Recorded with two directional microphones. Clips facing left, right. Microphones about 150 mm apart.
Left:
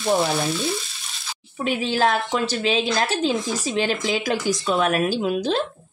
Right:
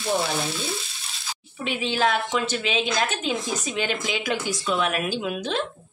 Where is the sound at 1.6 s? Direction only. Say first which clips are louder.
Left 3 dB; 40° left (ahead or behind).